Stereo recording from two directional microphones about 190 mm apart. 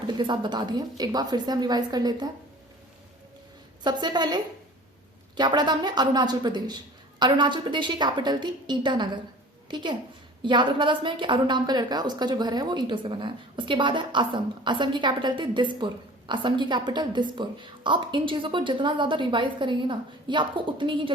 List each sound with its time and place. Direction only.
0.1 s a woman's voice: 25° right (ahead or behind)
3.8 s a woman's voice: 20° right (ahead or behind)
5.4 s a woman's voice: 20° right (ahead or behind)